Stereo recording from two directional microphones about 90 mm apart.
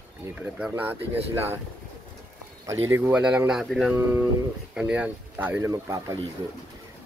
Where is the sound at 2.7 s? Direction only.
25° right (ahead or behind).